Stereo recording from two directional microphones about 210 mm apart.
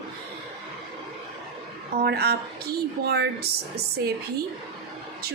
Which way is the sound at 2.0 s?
50° right (ahead or behind).